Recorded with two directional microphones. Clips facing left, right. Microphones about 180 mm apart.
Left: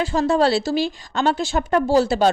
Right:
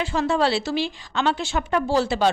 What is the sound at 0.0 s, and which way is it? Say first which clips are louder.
A woman's voice: left 4 dB; 40° left (ahead or behind).